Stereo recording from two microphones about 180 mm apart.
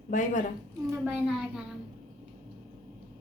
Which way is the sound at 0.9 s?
10° right (ahead or behind).